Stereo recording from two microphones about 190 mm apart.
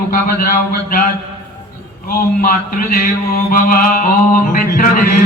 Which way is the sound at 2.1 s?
50° left (ahead or behind).